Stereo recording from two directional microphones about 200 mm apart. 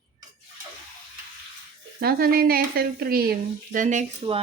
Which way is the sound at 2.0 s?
50° right (ahead or behind).